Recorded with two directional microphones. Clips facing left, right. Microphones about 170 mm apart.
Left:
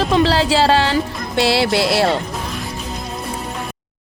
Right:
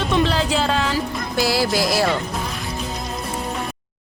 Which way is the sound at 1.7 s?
30° left (ahead or behind).